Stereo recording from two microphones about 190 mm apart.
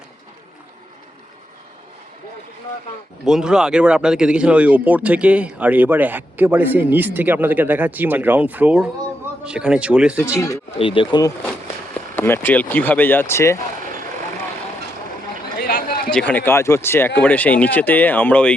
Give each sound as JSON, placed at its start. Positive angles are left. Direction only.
{"t": 3.2, "sound": "speech", "side_deg": -5}
{"t": 10.8, "sound": "speech", "side_deg": 25}
{"t": 12.1, "sound": "speech", "side_deg": 10}
{"t": 15.5, "sound": "a sound", "side_deg": 50}
{"t": 16.0, "sound": "speech", "side_deg": 5}